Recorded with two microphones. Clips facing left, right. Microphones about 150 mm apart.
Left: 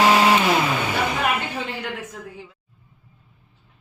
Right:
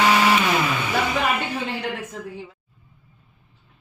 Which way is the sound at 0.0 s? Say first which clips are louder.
Left 2 dB; 30° left (ahead or behind).